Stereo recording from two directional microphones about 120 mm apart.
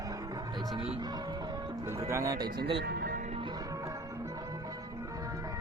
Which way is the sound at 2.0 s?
25° right (ahead or behind).